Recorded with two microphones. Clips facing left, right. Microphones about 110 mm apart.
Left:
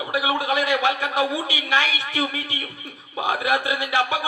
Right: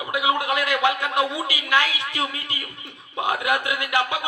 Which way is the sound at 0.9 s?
15° left (ahead or behind).